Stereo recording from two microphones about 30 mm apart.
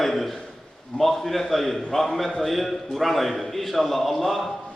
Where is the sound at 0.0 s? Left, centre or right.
Centre.